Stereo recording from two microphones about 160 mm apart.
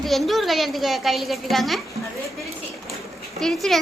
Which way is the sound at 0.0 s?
Centre (ahead or behind).